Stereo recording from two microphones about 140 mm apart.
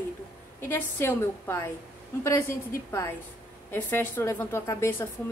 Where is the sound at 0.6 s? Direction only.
15° left (ahead or behind).